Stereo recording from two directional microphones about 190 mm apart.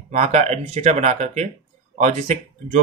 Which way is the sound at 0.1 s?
35° right (ahead or behind).